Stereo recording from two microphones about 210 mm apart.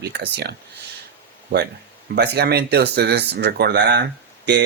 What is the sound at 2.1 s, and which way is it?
Speech, 50° right (ahead or behind).